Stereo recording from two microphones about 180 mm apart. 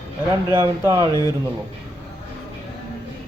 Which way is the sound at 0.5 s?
15° right (ahead or behind).